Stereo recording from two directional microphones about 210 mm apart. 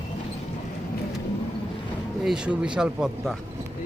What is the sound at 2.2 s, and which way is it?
Speech, 5° right (ahead or behind).